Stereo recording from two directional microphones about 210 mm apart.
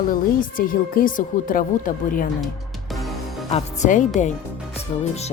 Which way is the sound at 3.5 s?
35° left (ahead or behind).